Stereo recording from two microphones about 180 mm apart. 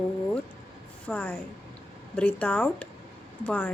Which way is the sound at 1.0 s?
10° left (ahead or behind).